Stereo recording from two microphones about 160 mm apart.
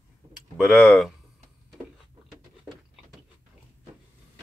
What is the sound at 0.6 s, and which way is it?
Speech, centre (ahead or behind).